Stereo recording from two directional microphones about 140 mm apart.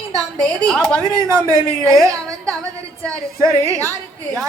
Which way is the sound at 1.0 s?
25° right (ahead or behind).